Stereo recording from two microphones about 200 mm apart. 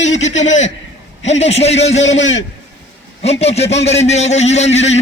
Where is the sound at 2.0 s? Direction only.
65° left (ahead or behind).